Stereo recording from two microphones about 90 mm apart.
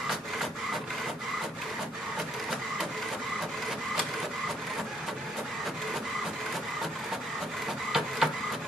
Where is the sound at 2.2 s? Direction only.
Centre (ahead or behind).